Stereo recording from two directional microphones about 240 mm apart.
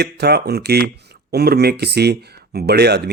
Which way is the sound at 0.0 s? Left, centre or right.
Right.